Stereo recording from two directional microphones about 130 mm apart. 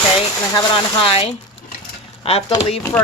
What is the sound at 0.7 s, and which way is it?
Speech, 45° left (ahead or behind).